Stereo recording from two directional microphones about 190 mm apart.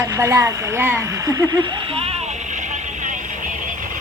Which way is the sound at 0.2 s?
15° right (ahead or behind).